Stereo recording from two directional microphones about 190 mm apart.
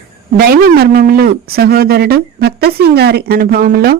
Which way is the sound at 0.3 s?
50° right (ahead or behind).